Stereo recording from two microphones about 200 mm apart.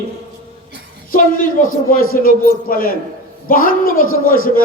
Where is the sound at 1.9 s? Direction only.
45° left (ahead or behind).